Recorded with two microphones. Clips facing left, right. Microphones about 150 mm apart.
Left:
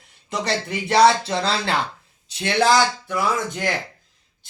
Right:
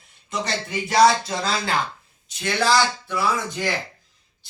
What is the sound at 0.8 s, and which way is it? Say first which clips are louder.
Speech: left 1 dB; 30° left (ahead or behind).